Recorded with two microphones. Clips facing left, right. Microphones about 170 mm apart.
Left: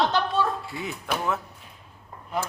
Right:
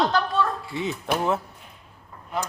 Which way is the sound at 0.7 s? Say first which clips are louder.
Right 5 dB; 25° right (ahead or behind).